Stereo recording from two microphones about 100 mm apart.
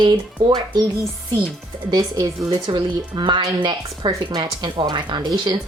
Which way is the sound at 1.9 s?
50° right (ahead or behind).